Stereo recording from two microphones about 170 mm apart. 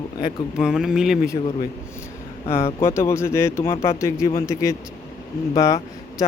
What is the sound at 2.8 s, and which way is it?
Speech, 15° left (ahead or behind).